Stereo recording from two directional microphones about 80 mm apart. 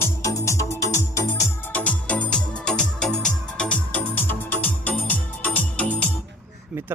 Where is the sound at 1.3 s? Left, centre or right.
Centre.